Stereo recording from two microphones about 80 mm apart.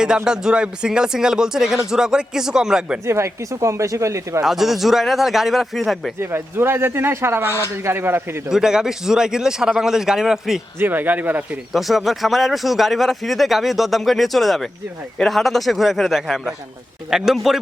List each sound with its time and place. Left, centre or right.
0.3 s a man's voice: centre
3.1 s speech: right
4.4 s speech: centre
6.1 s speech: right
8.4 s a man's voice: centre
10.8 s speech: right
11.7 s speech: centre